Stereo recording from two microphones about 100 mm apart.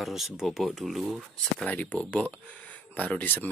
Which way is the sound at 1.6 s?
15° left (ahead or behind).